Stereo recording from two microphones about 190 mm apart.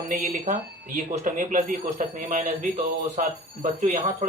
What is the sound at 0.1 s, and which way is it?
Speech, 45° right (ahead or behind).